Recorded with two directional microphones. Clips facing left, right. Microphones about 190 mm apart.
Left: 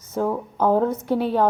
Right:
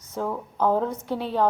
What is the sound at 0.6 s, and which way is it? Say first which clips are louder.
Speech: left 4 dB; 45° left (ahead or behind).